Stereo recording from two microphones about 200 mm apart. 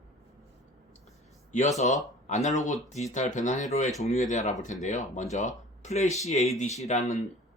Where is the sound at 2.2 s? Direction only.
35° left (ahead or behind).